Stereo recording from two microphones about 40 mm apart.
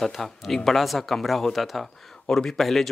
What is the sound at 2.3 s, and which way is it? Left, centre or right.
Speech, centre.